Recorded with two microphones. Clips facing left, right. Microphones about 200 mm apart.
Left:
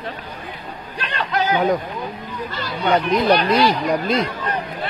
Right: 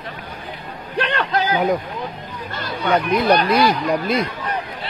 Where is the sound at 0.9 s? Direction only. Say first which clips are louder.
Right 6 dB; 60° right (ahead or behind).